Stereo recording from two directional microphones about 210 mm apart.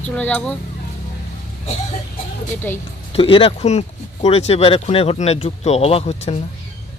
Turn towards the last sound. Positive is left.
turn(degrees=30)  # may be behind; listen again after turning